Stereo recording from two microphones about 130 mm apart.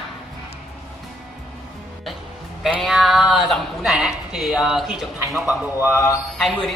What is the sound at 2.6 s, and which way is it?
Speech, 5° right (ahead or behind).